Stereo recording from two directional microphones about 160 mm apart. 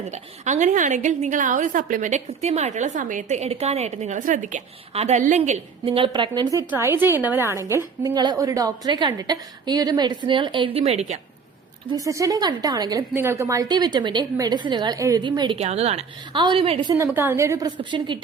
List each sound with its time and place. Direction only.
0.1 s a woman's voice: 50° right (ahead or behind)
11.9 s a woman's voice: 20° right (ahead or behind)
16.9 s a woman's voice: 15° right (ahead or behind)
17.7 s a woman's voice: 30° right (ahead or behind)